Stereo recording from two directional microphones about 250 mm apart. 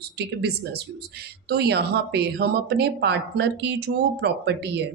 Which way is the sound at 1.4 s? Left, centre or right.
Right.